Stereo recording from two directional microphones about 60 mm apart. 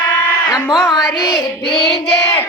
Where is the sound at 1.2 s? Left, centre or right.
Left.